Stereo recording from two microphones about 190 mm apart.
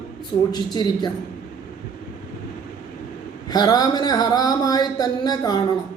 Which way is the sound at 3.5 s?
20° left (ahead or behind).